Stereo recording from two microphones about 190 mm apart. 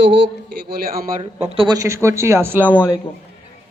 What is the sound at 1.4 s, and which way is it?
Speech, 30° right (ahead or behind).